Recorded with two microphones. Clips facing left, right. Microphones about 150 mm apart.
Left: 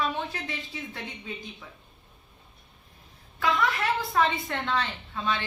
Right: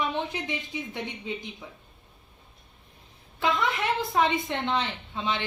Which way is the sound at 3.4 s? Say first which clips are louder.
Even; 20° right (ahead or behind).